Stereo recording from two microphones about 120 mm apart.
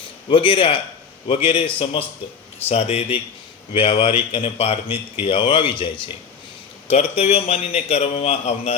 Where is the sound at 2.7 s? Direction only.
55° left (ahead or behind).